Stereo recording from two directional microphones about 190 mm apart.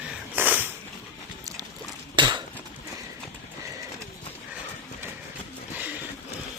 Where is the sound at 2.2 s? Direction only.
25° right (ahead or behind).